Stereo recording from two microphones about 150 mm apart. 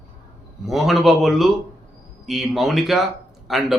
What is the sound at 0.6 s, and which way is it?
A man's voice, centre (ahead or behind).